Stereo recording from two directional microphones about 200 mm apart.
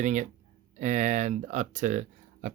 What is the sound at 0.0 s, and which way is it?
Speech, 40° right (ahead or behind).